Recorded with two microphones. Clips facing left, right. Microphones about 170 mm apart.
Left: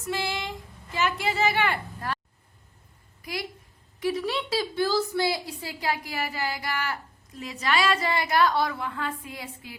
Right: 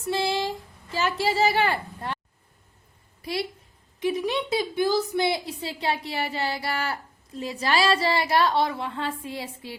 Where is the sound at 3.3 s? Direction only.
30° right (ahead or behind).